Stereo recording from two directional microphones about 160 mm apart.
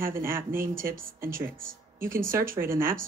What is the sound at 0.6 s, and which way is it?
Speech, 60° right (ahead or behind).